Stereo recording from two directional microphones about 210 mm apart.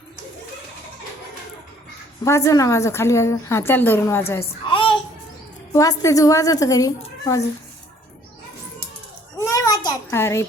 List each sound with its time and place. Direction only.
2.2 s a woman's voice: 15° left (ahead or behind)
4.6 s child singing: 25° left (ahead or behind)
5.7 s a woman's voice: 15° left (ahead or behind)
9.4 s a sound: 15° left (ahead or behind)